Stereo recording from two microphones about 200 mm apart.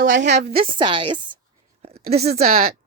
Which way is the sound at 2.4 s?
45° right (ahead or behind).